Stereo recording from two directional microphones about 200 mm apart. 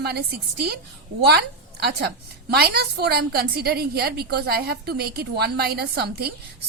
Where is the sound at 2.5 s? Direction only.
50° right (ahead or behind).